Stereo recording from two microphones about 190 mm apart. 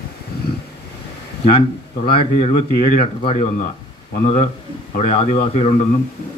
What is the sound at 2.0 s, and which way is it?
Speech, 30° left (ahead or behind).